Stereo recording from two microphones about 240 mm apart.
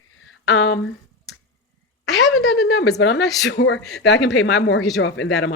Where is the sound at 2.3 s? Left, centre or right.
Left.